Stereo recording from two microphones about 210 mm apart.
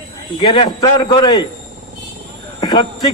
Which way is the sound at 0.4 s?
20° left (ahead or behind).